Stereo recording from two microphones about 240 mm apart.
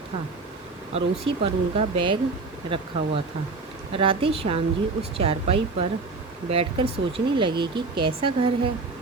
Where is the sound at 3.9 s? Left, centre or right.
Right.